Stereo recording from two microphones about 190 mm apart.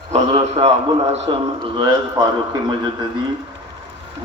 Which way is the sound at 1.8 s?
25° right (ahead or behind).